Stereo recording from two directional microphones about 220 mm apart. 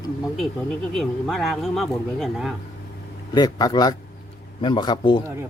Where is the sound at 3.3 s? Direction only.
20° left (ahead or behind).